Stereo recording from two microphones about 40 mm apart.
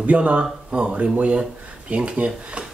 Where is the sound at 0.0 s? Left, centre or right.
Right.